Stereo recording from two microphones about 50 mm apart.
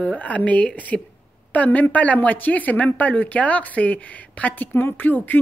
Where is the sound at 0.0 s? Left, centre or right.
Left.